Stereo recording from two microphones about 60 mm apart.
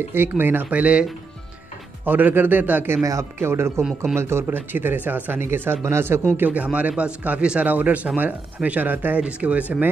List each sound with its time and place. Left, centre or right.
0.4 s speech: right
0.7 s speech: right
2.0 s speech: right
3.0 s speech: right
3.3 s speech: right
4.6 s speech: right
5.4 s speech: right
6.3 s speech: right